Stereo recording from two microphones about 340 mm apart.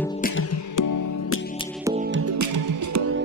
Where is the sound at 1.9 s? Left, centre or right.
Right.